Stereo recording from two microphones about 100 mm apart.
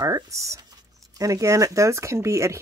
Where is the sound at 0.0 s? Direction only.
35° right (ahead or behind).